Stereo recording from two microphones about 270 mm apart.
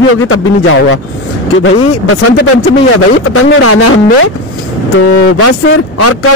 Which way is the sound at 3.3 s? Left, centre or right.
Left.